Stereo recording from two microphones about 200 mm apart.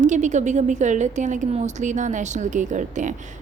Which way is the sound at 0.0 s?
35° right (ahead or behind).